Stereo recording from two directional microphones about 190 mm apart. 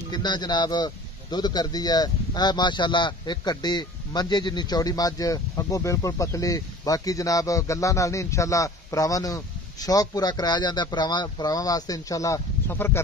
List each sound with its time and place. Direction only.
0.1 s speech: 20° left (ahead or behind)